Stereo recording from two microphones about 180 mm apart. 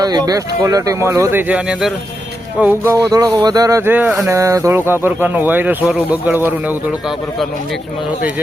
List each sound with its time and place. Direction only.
0.0 s speech: 20° right (ahead or behind)